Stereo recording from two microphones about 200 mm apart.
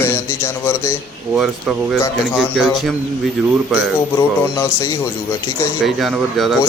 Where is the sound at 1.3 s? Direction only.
5° right (ahead or behind).